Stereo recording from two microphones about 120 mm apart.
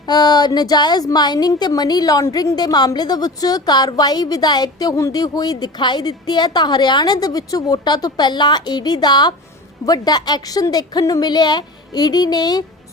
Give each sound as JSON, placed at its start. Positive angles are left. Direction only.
{"t": 0.0, "sound": "a woman's voice", "side_deg": 35}